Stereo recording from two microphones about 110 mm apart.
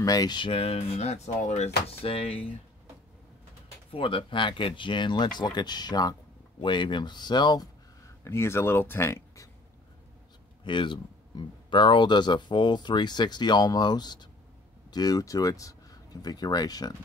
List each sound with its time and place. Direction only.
0.0 s speech: 35° left (ahead or behind)
0.5 s speech: 60° left (ahead or behind)
3.9 s speech: 55° left (ahead or behind); by 7.7 s 40° left (ahead or behind)
8.2 s speech: 25° left (ahead or behind)
10.6 s speech: 45° left (ahead or behind)